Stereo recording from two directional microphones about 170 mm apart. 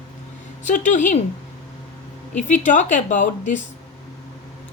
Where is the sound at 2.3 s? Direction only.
45° left (ahead or behind).